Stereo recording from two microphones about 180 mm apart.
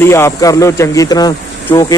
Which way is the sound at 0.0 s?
15° left (ahead or behind).